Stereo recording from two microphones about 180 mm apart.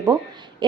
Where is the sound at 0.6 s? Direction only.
25° right (ahead or behind).